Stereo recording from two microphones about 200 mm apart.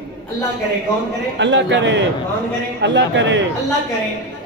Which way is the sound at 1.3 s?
65° right (ahead or behind).